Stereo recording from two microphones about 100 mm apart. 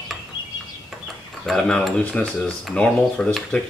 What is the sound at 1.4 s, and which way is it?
Speech, 5° left (ahead or behind).